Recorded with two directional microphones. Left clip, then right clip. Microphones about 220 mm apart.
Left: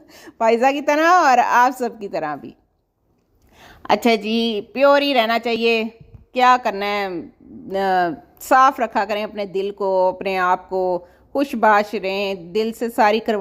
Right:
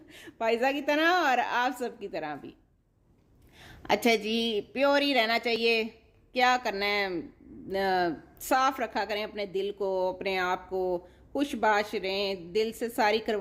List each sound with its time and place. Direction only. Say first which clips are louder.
0.1 s a woman's voice: left 11 dB; 25° left (ahead or behind)
3.6 s a woman's voice: left 9 dB; 20° left (ahead or behind)